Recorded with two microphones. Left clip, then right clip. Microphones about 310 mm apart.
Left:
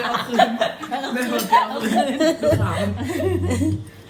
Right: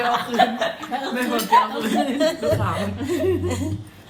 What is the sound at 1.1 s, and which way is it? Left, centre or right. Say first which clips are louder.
Speech: even; centre.